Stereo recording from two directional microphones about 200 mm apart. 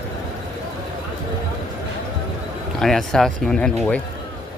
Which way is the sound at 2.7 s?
Centre (ahead or behind).